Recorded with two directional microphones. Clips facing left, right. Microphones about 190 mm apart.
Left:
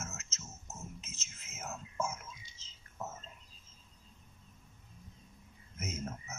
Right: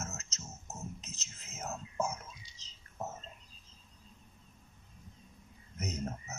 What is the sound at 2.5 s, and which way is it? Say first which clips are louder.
Bird: right 2 dB; 35° right (ahead or behind).